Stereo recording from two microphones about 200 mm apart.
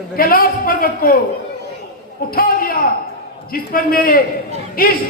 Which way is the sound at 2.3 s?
45° left (ahead or behind).